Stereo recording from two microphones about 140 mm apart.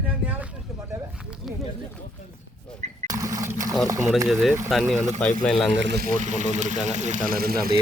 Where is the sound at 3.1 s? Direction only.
25° right (ahead or behind).